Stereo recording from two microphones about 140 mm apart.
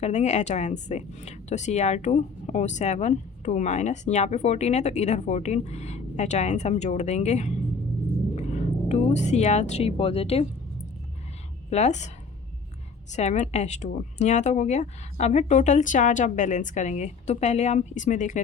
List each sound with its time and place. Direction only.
0.0 s speech: 55° left (ahead or behind)
11.7 s speech: 55° left (ahead or behind)